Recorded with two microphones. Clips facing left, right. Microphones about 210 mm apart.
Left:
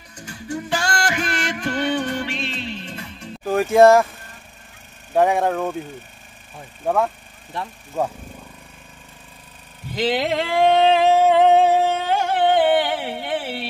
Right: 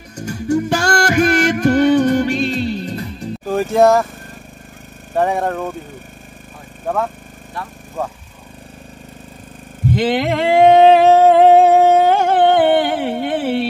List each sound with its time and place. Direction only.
0.1 s music: 45° right (ahead or behind)
3.4 s speech: centre (ahead or behind)
5.1 s speech: centre (ahead or behind)
9.9 s singing: 50° right (ahead or behind)